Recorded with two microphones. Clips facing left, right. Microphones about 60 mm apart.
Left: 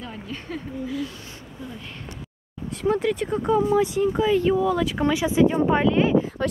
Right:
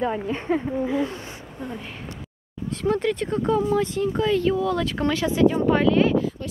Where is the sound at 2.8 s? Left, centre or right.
Centre.